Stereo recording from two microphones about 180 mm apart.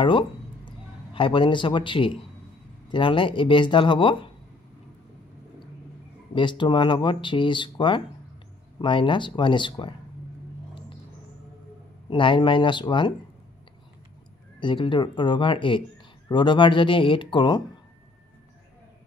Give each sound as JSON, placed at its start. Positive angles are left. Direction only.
{"t": 0.7, "sound": "a man's voice", "side_deg": 30}
{"t": 6.3, "sound": "speech", "side_deg": 25}
{"t": 12.1, "sound": "speech", "side_deg": 25}
{"t": 14.6, "sound": "speech", "side_deg": 25}